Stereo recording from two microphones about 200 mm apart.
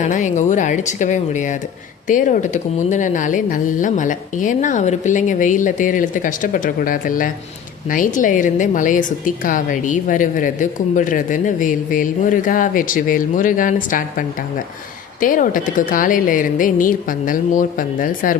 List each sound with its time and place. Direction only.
0.0 s a woman's voice: 40° left (ahead or behind)